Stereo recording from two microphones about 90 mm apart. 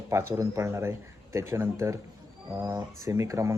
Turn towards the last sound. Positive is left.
turn(degrees=-35)  # may be behind; listen again after turning